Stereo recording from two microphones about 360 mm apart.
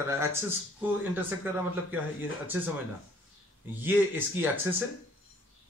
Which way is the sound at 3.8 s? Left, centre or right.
Centre.